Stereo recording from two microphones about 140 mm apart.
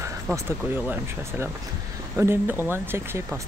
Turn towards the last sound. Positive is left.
turn(degrees=-15)  # may be behind; listen again after turning